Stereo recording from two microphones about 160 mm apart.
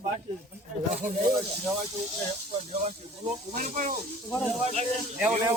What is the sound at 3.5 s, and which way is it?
Speech, 55° right (ahead or behind).